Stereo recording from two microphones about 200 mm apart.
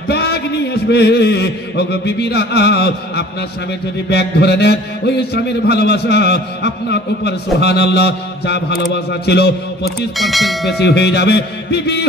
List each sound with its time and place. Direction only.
0.1 s a sound: 55° left (ahead or behind)
4.1 s a man's voice: 55° left (ahead or behind)
10.1 s speech: centre (ahead or behind)
10.8 s a man's voice: 55° left (ahead or behind)